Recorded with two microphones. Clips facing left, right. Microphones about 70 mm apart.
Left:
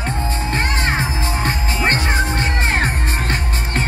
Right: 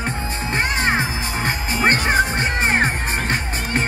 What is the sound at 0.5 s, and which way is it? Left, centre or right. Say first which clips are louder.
Music: right 2 dB; centre.